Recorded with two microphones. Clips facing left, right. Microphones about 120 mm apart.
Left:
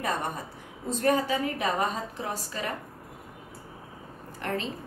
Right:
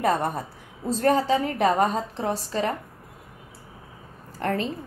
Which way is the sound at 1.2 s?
30° right (ahead or behind).